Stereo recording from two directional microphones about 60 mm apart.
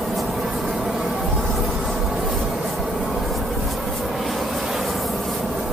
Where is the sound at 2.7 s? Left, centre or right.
Centre.